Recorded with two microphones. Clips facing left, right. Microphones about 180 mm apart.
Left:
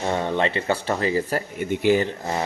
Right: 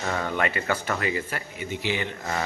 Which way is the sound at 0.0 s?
25° left (ahead or behind).